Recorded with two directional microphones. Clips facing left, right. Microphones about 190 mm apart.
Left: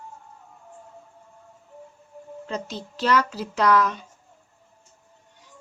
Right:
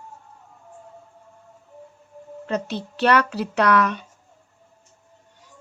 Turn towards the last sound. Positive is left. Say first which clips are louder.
# right 1 dB
turn(degrees=-65)  # may be behind; listen again after turning